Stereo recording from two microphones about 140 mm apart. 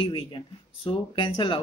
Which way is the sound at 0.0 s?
40° left (ahead or behind).